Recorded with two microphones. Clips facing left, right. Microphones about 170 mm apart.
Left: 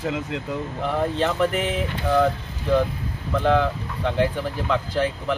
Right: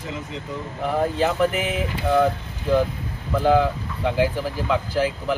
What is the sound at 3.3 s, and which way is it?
Speech, 5° right (ahead or behind).